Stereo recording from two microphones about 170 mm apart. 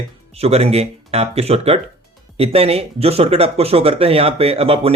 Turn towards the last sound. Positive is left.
turn(degrees=-35)  # may be behind; listen again after turning